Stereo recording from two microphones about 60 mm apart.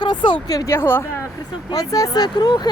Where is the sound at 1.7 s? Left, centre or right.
Left.